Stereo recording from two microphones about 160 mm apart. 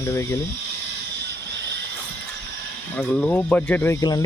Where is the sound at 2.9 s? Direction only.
10° left (ahead or behind).